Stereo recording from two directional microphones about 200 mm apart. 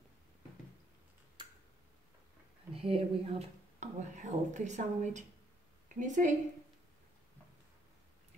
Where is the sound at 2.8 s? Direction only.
30° right (ahead or behind).